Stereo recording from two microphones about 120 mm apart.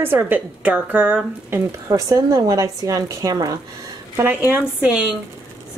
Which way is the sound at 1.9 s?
30° right (ahead or behind).